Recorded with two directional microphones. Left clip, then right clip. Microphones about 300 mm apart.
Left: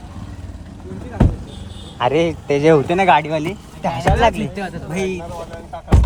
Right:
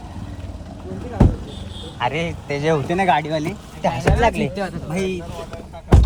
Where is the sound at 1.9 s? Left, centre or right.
Centre.